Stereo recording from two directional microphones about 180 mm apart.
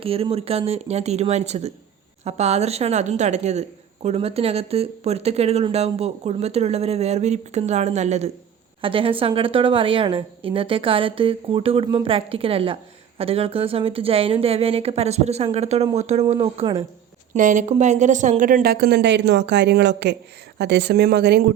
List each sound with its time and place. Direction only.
0.0 s a woman's voice: 30° right (ahead or behind)
12.1 s a woman's voice: 30° right (ahead or behind)
17.3 s a woman's voice: 45° right (ahead or behind); by 21.4 s 65° right (ahead or behind)